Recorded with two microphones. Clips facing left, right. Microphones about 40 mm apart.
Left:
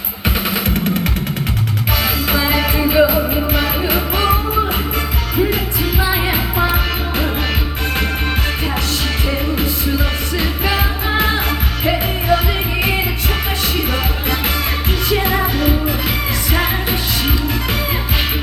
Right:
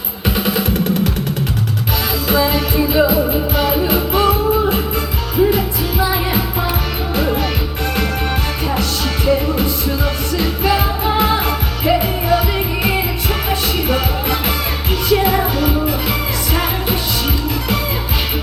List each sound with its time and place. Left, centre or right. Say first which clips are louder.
0.3 s music: right 2 dB; centre
2.3 s music: right 3 dB; centre
6.0 s music: right 1 dB; centre
10.3 s music: right 2 dB; centre
13.9 s music: right 2 dB; centre